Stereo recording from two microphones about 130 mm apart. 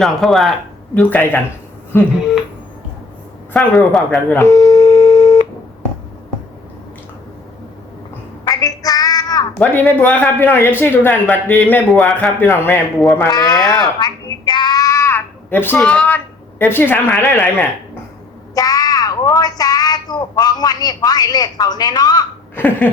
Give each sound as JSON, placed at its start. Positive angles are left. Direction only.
{"t": 0.0, "sound": "speech", "side_deg": 0}
{"t": 0.9, "sound": "speech", "side_deg": 15}
{"t": 3.5, "sound": "speech", "side_deg": 0}
{"t": 4.3, "sound": "telephone", "side_deg": 20}
{"t": 8.4, "sound": "child singing", "side_deg": 25}
{"t": 9.6, "sound": "speech", "side_deg": 15}
{"t": 13.3, "sound": "speech", "side_deg": 30}
{"t": 18.5, "sound": "speech", "side_deg": 30}
{"t": 22.5, "sound": "speech", "side_deg": 15}